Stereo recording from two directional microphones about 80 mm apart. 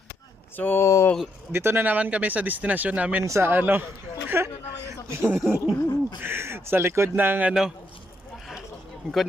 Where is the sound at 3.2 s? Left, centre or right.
Right.